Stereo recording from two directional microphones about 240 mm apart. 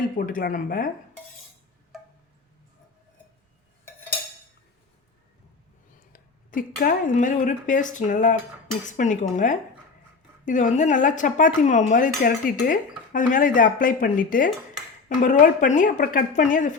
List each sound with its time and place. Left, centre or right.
0.3 s speech: left
6.1 s speech: left